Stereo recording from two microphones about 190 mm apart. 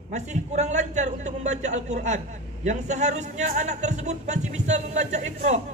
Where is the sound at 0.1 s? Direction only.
35° right (ahead or behind).